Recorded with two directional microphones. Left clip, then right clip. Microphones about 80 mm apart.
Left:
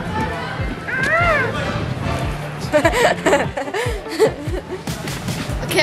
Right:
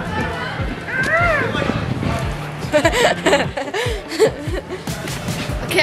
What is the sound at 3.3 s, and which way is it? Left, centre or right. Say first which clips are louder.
Chuckle: even; centre.